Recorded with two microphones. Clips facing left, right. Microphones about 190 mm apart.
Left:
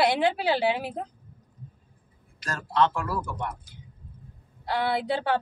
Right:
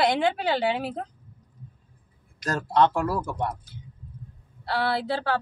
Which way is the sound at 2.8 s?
40° right (ahead or behind).